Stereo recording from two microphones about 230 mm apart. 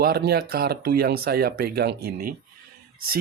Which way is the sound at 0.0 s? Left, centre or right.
Right.